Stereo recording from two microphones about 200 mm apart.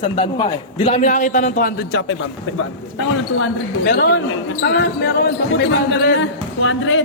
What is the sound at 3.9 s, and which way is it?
Speech, 55° left (ahead or behind).